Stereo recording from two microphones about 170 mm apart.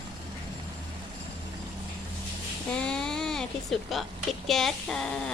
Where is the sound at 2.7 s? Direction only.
5° left (ahead or behind).